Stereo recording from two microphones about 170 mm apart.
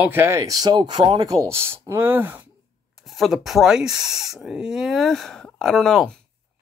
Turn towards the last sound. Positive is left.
turn(degrees=5)  # may be behind; listen again after turning